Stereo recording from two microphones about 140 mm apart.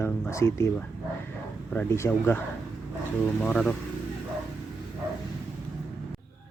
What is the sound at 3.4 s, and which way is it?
Speech, 10° left (ahead or behind).